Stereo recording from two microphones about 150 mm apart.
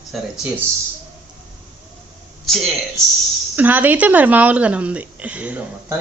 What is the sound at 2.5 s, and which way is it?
Speech, centre (ahead or behind).